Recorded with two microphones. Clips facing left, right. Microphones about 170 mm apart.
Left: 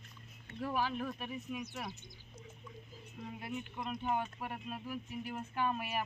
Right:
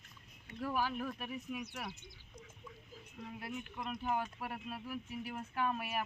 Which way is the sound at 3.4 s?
Centre (ahead or behind).